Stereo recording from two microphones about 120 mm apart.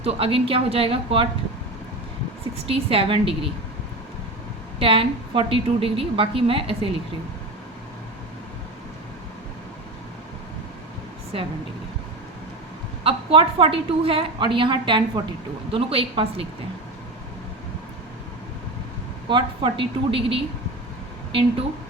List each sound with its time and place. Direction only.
0.0 s a woman's voice: 50° right (ahead or behind)
2.6 s a woman's voice: 50° right (ahead or behind)
4.8 s a woman's voice: 50° right (ahead or behind)
13.1 s a woman's voice: 50° right (ahead or behind)
19.3 s a woman's voice: 40° right (ahead or behind)